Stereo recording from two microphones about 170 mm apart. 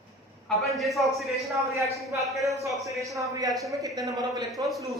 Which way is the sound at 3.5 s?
Centre (ahead or behind).